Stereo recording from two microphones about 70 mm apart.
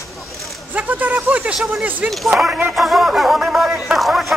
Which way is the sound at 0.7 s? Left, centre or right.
Right.